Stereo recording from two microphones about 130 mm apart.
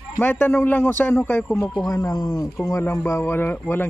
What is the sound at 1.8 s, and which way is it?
Speech, 30° left (ahead or behind).